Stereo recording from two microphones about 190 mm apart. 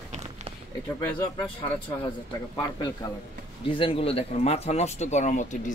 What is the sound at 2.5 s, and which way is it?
Speech, 20° left (ahead or behind).